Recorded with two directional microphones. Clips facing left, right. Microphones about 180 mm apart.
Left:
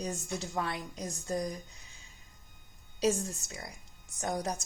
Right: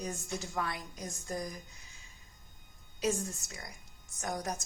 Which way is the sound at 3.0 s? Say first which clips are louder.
Left 3 dB; 30° left (ahead or behind).